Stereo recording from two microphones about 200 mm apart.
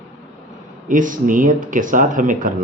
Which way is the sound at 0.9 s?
40° right (ahead or behind).